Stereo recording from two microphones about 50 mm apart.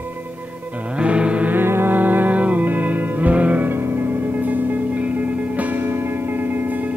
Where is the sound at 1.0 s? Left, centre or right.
Right.